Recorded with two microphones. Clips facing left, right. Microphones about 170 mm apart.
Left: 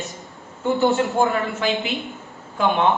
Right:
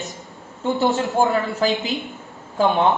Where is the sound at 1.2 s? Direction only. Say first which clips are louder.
Right 2 dB; 35° right (ahead or behind).